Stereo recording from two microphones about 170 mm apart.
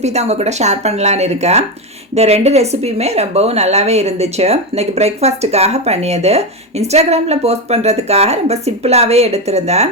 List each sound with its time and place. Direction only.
0.0 s speech: 40° right (ahead or behind)